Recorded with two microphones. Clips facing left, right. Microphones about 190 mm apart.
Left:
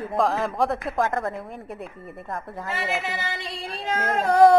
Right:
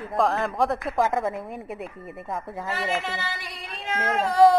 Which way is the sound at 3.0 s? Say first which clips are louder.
Left 2 dB; 15° left (ahead or behind).